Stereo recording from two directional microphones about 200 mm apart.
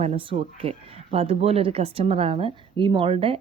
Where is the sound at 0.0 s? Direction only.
30° right (ahead or behind).